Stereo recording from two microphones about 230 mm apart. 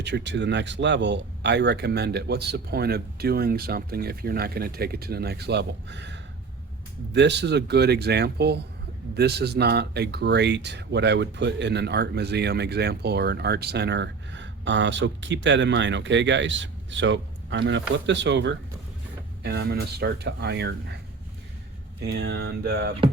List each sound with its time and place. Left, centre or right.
0.0 s speech: right
22.0 s speech: right